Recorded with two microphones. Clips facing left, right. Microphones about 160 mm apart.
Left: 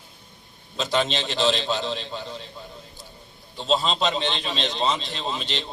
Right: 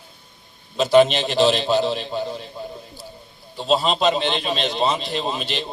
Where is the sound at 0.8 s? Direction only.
15° right (ahead or behind).